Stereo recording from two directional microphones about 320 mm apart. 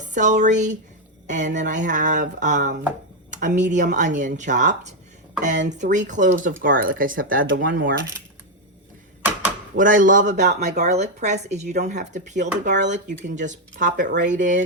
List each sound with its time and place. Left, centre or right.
0.0 s speech: right
9.7 s speech: right
12.6 s speech: right